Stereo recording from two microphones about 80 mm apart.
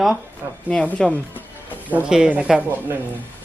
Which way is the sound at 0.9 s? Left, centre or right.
Centre.